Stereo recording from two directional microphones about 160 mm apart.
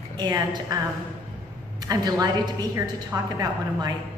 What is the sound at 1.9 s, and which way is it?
A woman's voice, 25° right (ahead or behind).